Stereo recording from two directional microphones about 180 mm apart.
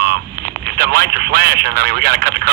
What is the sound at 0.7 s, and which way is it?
Speech, 60° right (ahead or behind).